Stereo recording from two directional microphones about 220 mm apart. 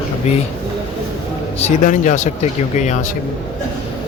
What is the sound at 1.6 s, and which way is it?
Speech, 30° left (ahead or behind).